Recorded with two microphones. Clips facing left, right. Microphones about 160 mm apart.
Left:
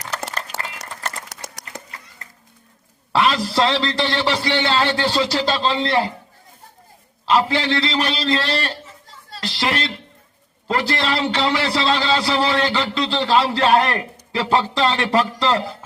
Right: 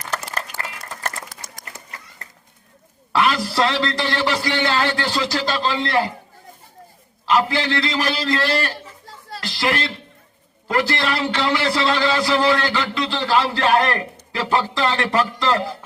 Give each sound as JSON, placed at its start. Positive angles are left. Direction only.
{"t": 0.0, "sound": "a sound", "side_deg": 75}
{"t": 3.1, "sound": "a man's voice", "side_deg": 30}
{"t": 7.3, "sound": "a man's voice", "side_deg": 25}